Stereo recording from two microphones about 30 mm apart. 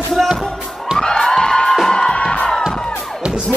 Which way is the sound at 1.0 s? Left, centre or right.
Centre.